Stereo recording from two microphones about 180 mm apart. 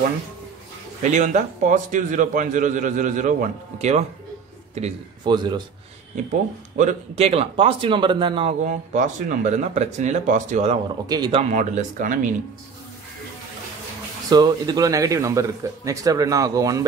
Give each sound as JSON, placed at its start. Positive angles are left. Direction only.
{"t": 1.0, "sound": "a man's voice", "side_deg": -45}
{"t": 5.2, "sound": "a man's voice", "side_deg": -25}
{"t": 6.8, "sound": "speech", "side_deg": -40}
{"t": 8.6, "sound": "a man's voice", "side_deg": -45}
{"t": 11.1, "sound": "a man's voice", "side_deg": -20}
{"t": 11.5, "sound": "a man's voice", "side_deg": -45}
{"t": 14.3, "sound": "a man's voice", "side_deg": -20}